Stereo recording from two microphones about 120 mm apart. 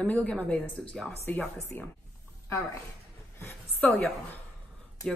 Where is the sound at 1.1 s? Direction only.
20° left (ahead or behind).